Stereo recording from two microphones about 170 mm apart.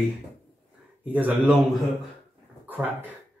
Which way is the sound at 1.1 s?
10° right (ahead or behind).